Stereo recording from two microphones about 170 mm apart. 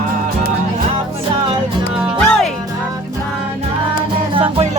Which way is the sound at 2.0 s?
Centre (ahead or behind).